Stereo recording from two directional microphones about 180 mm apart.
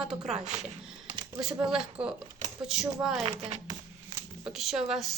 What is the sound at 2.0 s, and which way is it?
Speech, 5° right (ahead or behind).